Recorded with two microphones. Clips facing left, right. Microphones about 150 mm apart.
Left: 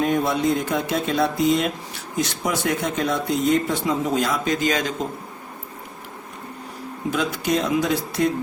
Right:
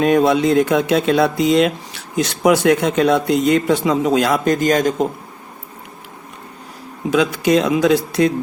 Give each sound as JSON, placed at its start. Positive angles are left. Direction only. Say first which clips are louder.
{"t": 0.0, "sound": "speech", "louder": "right 7 dB", "side_deg": -80}
{"t": 4.4, "sound": "a man's voice", "louder": "right 7 dB", "side_deg": -50}
{"t": 7.1, "sound": "speech", "louder": "right 8 dB", "side_deg": -90}